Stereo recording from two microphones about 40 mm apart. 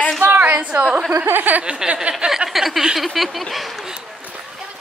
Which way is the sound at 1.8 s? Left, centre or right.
Centre.